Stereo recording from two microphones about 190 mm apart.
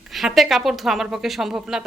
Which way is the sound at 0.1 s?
Centre (ahead or behind).